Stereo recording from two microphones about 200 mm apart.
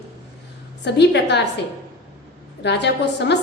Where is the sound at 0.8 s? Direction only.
60° left (ahead or behind).